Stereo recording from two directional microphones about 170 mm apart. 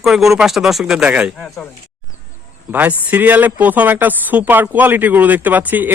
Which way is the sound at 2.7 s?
10° right (ahead or behind).